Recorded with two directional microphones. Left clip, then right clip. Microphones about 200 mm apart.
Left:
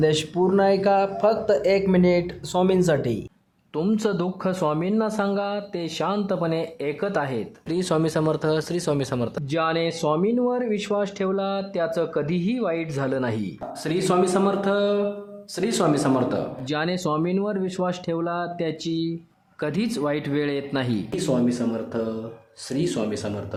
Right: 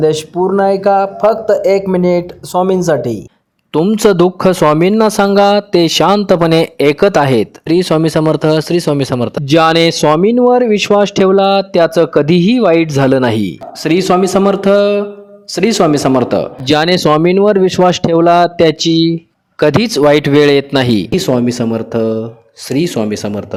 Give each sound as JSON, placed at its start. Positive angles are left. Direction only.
{"t": 0.0, "sound": "speech", "side_deg": -30}
{"t": 3.7, "sound": "speech", "side_deg": -45}
{"t": 7.8, "sound": "speech", "side_deg": -35}
{"t": 9.6, "sound": "speech", "side_deg": -45}